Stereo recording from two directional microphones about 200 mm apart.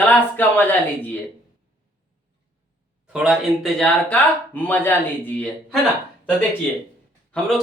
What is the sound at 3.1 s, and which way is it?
Speech, centre (ahead or behind).